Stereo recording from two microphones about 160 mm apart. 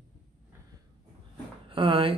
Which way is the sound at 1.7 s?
35° right (ahead or behind).